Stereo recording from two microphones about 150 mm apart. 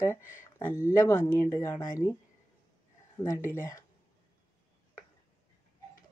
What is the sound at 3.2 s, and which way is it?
Speech, 20° left (ahead or behind).